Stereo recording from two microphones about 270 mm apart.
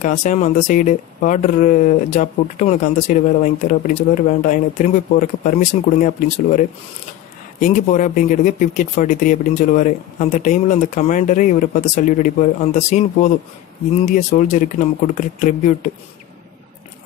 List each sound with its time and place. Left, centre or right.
0.0 s speech: left
7.6 s speech: left